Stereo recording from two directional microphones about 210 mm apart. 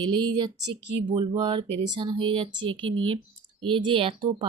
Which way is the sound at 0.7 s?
60° right (ahead or behind).